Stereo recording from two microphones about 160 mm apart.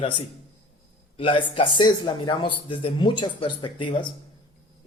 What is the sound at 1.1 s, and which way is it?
Speech, 35° left (ahead or behind).